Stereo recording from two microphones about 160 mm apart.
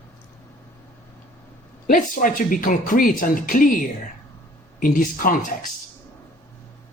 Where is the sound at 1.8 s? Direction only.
60° left (ahead or behind).